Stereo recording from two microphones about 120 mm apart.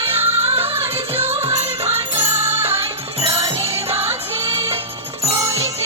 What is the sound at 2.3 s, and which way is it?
Music, 20° right (ahead or behind).